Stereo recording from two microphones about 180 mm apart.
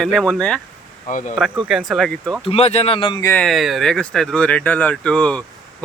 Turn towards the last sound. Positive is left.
turn(degrees=5)  # may be behind; listen again after turning